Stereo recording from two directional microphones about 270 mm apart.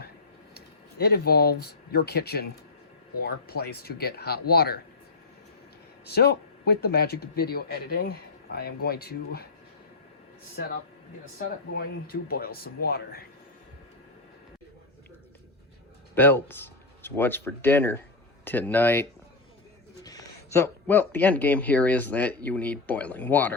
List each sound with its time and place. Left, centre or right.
0.5 s speech: left
6.1 s speech: left
11.3 s speech: left
16.1 s speech: centre